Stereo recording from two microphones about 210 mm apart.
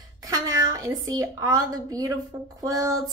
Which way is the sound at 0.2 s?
15° right (ahead or behind).